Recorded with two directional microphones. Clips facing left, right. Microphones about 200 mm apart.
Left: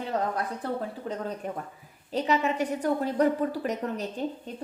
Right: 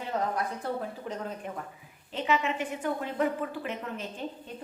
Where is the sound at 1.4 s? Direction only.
40° left (ahead or behind).